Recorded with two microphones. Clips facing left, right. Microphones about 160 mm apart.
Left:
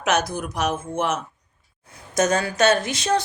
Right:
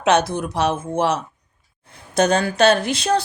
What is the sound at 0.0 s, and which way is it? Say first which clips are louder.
Speech: right 5 dB; 30° right (ahead or behind).